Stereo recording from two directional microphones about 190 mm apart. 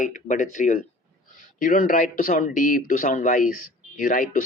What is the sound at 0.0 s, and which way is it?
Speech, 40° left (ahead or behind).